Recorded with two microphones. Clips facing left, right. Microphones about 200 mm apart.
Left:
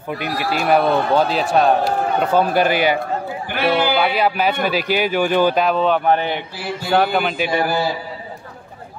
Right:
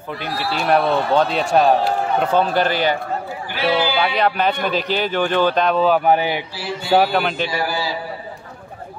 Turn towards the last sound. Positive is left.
turn(degrees=55)  # may be behind; listen again after turning